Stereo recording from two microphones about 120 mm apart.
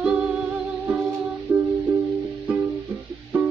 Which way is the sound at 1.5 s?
30° right (ahead or behind).